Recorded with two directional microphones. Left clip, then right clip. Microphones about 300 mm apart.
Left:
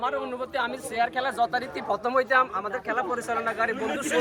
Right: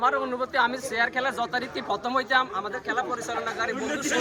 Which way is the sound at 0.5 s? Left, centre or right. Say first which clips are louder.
Right 4 dB; centre.